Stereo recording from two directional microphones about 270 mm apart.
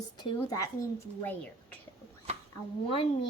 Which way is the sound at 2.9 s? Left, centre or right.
Left.